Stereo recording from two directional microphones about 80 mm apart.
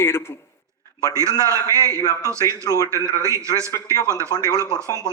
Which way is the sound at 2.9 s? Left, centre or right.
Right.